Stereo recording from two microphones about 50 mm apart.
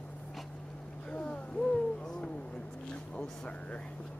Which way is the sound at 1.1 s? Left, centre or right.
Left.